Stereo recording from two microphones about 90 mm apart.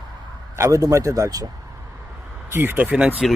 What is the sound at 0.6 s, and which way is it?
Speech, 40° right (ahead or behind).